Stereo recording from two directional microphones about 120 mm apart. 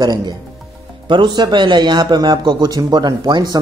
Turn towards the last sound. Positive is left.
turn(degrees=-35)  # may be behind; listen again after turning